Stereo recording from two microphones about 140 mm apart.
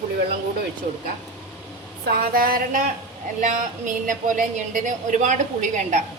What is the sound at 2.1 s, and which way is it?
Speech, 90° right.